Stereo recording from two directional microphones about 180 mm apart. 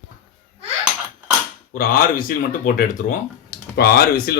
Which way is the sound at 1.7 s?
55° left (ahead or behind).